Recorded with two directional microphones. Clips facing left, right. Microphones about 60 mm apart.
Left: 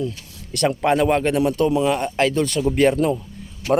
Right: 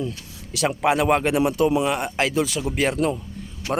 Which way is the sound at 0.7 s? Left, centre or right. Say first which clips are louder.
Left 1 dB; centre.